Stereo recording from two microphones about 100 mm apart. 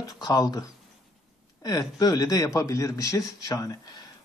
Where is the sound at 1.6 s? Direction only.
40° left (ahead or behind).